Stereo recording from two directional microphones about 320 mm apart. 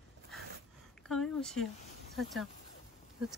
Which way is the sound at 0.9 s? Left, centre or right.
Centre.